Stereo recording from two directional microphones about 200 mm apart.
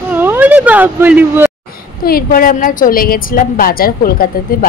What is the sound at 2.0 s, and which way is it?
A woman's voice, 45° left (ahead or behind).